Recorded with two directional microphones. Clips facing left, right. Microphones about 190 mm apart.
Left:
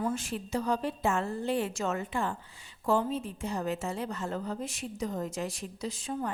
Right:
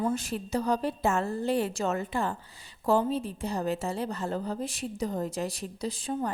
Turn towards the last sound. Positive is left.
turn(degrees=-35)  # may be behind; listen again after turning